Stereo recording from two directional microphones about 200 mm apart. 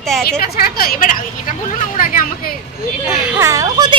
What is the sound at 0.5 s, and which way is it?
Speech, 45° left (ahead or behind).